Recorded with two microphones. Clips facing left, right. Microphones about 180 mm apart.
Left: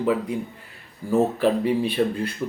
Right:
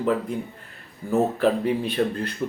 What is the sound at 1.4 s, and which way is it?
Speech, 5° left (ahead or behind).